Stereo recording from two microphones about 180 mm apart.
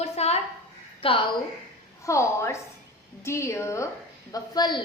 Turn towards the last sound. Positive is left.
turn(degrees=25)  # may be behind; listen again after turning